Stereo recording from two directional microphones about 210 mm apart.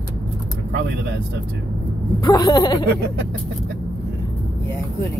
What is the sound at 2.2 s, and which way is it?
Speech, 20° left (ahead or behind).